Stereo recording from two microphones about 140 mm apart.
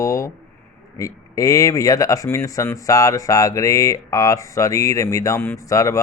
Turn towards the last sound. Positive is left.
turn(degrees=25)  # may be behind; listen again after turning